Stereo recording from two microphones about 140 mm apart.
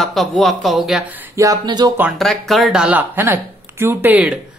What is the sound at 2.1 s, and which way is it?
Speech, centre (ahead or behind).